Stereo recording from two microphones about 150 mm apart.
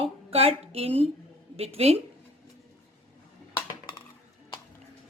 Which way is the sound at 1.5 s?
40° right (ahead or behind).